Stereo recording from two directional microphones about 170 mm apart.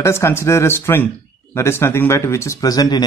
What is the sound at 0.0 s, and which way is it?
Speech, 15° left (ahead or behind).